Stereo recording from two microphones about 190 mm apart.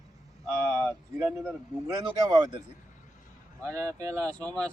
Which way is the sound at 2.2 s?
20° right (ahead or behind).